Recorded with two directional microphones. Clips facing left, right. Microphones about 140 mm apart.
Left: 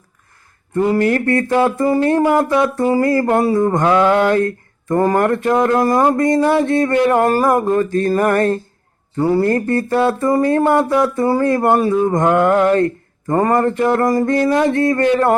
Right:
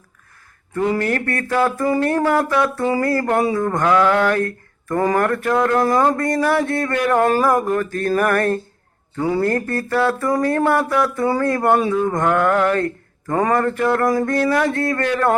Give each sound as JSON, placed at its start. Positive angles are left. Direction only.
{"t": 0.9, "sound": "speech", "side_deg": 20}
{"t": 9.1, "sound": "a man's voice", "side_deg": 5}
{"t": 9.4, "sound": "speech", "side_deg": 20}